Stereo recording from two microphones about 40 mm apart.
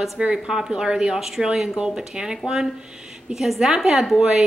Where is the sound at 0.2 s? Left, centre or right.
Centre.